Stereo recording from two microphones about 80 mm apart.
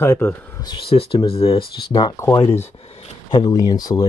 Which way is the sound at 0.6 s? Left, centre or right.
Left.